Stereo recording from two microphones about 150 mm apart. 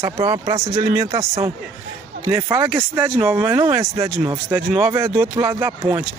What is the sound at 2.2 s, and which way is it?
Speech, 20° right (ahead or behind).